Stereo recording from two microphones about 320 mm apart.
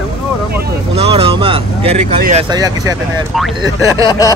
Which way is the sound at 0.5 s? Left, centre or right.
Right.